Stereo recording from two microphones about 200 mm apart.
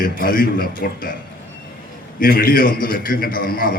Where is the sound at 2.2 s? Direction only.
45° left (ahead or behind).